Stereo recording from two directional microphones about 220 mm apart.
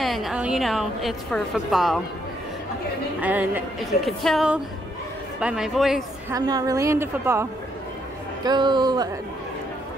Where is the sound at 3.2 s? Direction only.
5° right (ahead or behind).